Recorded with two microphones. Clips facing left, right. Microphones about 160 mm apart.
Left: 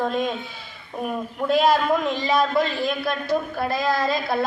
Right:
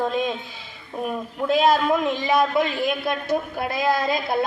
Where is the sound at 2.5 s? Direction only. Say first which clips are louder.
Even; 20° right (ahead or behind).